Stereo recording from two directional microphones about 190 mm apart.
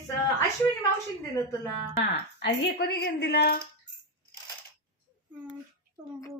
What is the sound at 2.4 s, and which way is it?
A woman's voice, 60° left (ahead or behind).